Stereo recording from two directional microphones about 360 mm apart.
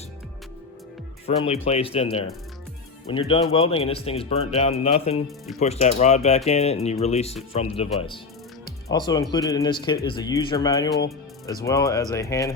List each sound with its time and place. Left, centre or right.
1.5 s speech: centre
8.9 s speech: centre